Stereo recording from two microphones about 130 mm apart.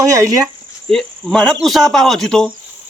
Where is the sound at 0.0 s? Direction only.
25° right (ahead or behind).